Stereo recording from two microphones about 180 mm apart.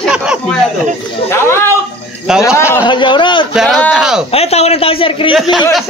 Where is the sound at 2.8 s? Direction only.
25° left (ahead or behind).